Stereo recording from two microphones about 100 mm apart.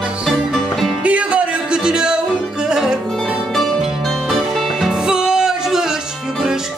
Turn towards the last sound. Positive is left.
turn(degrees=-5)  # may be behind; listen again after turning